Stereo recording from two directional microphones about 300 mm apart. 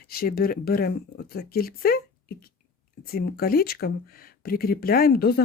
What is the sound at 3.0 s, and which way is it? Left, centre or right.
Speech, left.